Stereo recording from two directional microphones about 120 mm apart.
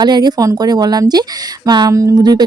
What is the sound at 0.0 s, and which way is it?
Speech, 35° right (ahead or behind).